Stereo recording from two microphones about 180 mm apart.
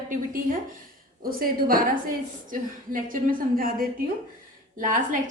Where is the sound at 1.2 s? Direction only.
55° right (ahead or behind).